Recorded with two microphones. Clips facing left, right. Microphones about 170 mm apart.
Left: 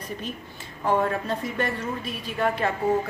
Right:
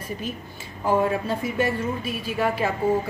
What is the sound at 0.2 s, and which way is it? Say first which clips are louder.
A woman's voice: right 2 dB; 5° right (ahead or behind).